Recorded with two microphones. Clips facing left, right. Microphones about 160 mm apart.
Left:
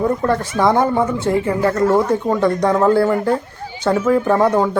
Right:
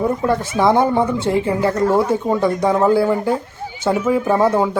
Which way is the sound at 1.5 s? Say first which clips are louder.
Left 2 dB; 15° right (ahead or behind).